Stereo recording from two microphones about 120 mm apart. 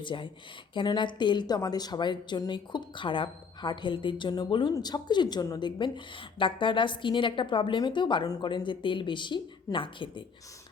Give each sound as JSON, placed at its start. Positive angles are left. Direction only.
{"t": 0.0, "sound": "a woman's voice", "side_deg": 45}